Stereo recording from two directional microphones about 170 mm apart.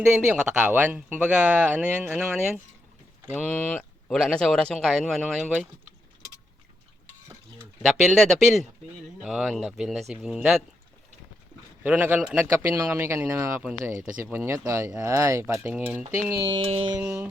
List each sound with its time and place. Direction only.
0.0 s speech: 5° right (ahead or behind)
3.3 s speech: 5° left (ahead or behind)
7.6 s speech: 5° right (ahead or behind)
11.8 s speech: 10° right (ahead or behind)